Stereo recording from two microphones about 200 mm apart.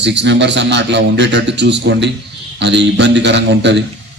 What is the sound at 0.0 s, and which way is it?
A man's voice, 60° right (ahead or behind).